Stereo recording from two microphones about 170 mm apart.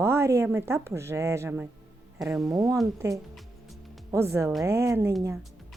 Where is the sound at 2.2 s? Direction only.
Centre (ahead or behind).